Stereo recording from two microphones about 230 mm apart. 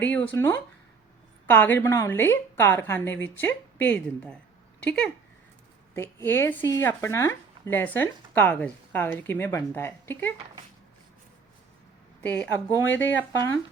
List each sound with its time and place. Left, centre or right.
0.0 s speech: centre
12.2 s speech: centre